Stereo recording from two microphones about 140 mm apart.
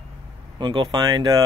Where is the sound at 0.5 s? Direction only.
35° right (ahead or behind).